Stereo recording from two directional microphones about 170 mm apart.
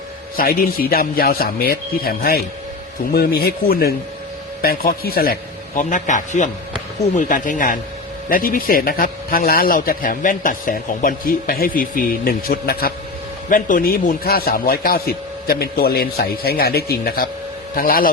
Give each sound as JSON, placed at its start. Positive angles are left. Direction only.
{"t": 0.3, "sound": "a man's voice", "side_deg": 60}